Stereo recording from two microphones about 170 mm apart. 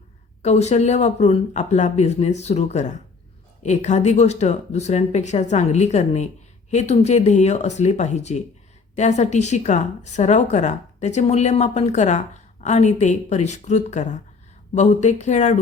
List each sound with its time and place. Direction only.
0.4 s a woman's voice: 40° left (ahead or behind)